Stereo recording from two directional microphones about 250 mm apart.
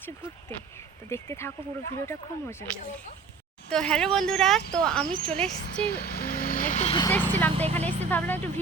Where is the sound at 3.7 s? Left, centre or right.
Centre.